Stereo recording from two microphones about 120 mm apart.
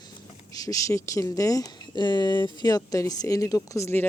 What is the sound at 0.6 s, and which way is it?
Speech, 30° left (ahead or behind).